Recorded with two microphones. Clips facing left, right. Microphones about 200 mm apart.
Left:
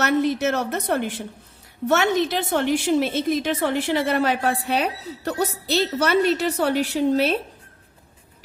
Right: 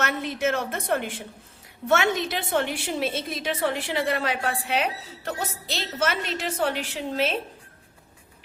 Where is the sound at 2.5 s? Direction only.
45° left (ahead or behind).